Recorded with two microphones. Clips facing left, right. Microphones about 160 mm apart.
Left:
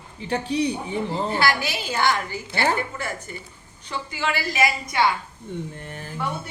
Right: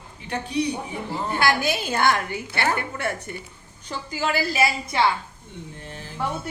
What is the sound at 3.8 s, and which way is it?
A woman's voice, 40° right (ahead or behind).